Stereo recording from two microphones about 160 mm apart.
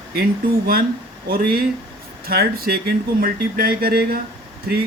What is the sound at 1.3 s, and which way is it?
Speech, 70° right (ahead or behind).